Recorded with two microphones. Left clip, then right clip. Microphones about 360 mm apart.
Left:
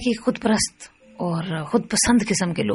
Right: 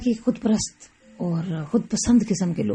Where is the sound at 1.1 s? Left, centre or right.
Left.